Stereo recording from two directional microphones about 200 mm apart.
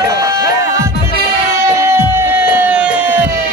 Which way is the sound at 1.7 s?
10° right (ahead or behind).